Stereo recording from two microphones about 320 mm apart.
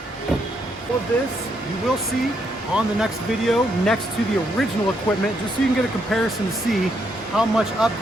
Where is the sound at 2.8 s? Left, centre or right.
Centre.